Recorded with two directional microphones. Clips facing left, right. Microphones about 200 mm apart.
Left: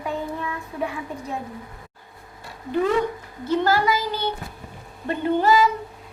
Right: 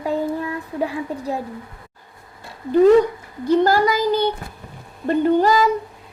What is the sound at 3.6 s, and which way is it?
A woman's voice, 40° right (ahead or behind).